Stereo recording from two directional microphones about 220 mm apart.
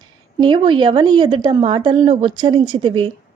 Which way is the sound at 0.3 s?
20° right (ahead or behind).